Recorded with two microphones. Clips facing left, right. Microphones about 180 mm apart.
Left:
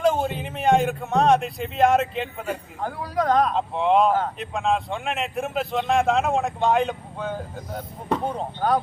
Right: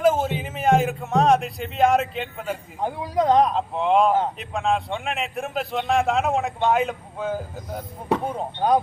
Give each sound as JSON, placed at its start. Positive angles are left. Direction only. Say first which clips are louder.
{"t": 0.0, "sound": "speech", "louder": "right 2 dB", "side_deg": -5}
{"t": 2.8, "sound": "speech", "louder": "right 3 dB", "side_deg": -20}
{"t": 3.5, "sound": "speech", "louder": "even", "side_deg": 0}
{"t": 8.5, "sound": "speech", "louder": "right 3 dB", "side_deg": -15}